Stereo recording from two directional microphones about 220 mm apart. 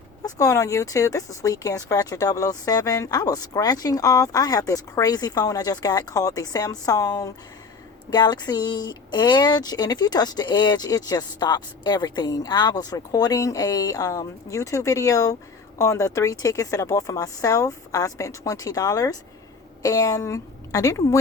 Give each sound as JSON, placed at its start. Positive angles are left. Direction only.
{"t": 0.3, "sound": "speech", "side_deg": 15}